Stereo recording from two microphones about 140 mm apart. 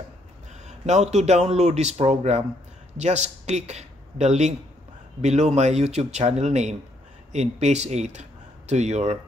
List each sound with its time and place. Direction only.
0.7 s speech: 55° right (ahead or behind)